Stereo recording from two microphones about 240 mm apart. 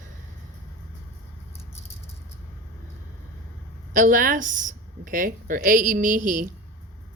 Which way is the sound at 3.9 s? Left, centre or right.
Right.